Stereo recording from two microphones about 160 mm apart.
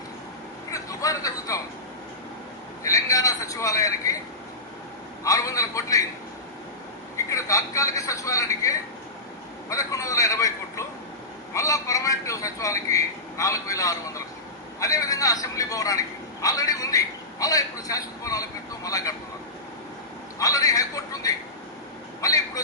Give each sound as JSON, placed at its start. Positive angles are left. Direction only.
{"t": 0.7, "sound": "a sound", "side_deg": 20}
{"t": 2.8, "sound": "a man's voice", "side_deg": 20}
{"t": 5.2, "sound": "a man's voice", "side_deg": 20}
{"t": 7.3, "sound": "a man's voice", "side_deg": 20}
{"t": 20.4, "sound": "a man's voice", "side_deg": 20}